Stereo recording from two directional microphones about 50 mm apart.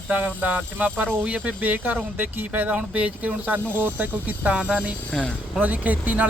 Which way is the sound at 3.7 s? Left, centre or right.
Right.